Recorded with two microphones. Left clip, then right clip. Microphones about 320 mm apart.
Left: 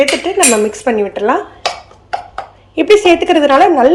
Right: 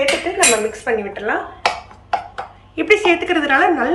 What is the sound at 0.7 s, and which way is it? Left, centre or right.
Speech, centre.